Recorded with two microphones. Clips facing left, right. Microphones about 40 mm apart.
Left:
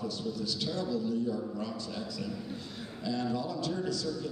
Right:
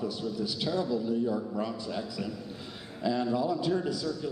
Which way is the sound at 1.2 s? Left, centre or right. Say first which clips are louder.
Right 3 dB; right.